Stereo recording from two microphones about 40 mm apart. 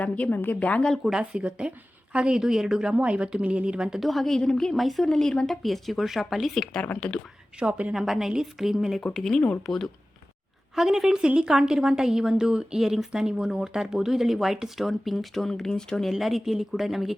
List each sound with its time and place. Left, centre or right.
0.0 s a woman's voice: left
1.3 s a woman's voice: right
2.9 s speech: right
4.0 s speech: centre
4.4 s a woman's voice: centre
4.7 s a woman's voice: centre
6.5 s a woman's voice: centre
7.0 s a woman's voice: left
7.6 s a woman's voice: right
7.9 s a woman's voice: centre
9.1 s a woman's voice: centre
10.8 s a woman's voice: centre
12.8 s a woman's voice: centre
16.1 s speech: centre